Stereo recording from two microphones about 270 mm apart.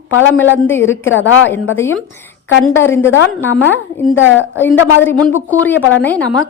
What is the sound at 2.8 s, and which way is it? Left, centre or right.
Speech, centre.